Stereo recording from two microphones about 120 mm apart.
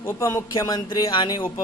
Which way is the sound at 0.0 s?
20° left (ahead or behind).